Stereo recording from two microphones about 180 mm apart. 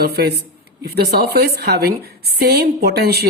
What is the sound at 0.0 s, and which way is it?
A woman's voice, 60° right (ahead or behind).